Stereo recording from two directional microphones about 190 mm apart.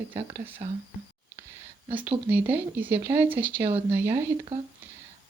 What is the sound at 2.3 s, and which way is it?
Speech, 10° right (ahead or behind).